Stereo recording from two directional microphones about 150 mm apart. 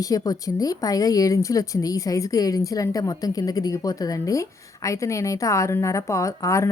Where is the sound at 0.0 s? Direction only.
25° left (ahead or behind).